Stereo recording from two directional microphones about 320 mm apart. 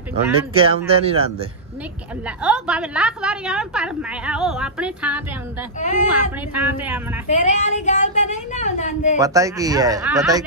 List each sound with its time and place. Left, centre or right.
0.5 s speech: centre
2.2 s a woman's voice: centre
5.8 s speech: left
6.5 s a woman's voice: centre
7.2 s speech: left
9.2 s speech: centre